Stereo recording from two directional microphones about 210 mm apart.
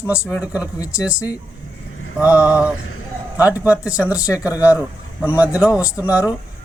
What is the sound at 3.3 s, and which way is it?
Speech, 15° left (ahead or behind).